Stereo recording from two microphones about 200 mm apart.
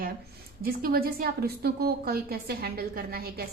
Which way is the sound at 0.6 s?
45° right (ahead or behind).